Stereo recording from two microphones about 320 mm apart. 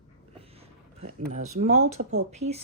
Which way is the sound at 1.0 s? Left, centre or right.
Right.